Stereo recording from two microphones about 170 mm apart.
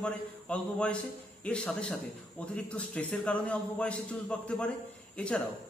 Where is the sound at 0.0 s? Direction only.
5° left (ahead or behind).